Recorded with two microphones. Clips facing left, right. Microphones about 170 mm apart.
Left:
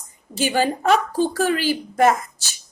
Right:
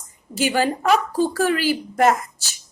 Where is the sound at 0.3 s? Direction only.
20° left (ahead or behind).